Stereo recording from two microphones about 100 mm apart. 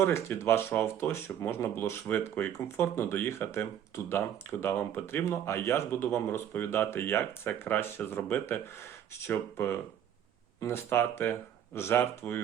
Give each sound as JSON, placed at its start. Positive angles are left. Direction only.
{"t": 0.0, "sound": "speech", "side_deg": 25}